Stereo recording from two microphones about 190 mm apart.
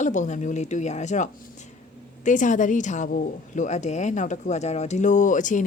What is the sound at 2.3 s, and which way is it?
A woman's voice, 40° left (ahead or behind).